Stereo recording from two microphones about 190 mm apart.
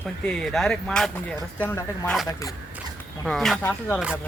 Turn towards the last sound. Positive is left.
turn(degrees=10)  # may be behind; listen again after turning